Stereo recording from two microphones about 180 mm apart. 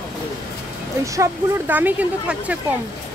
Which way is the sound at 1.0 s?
15° right (ahead or behind).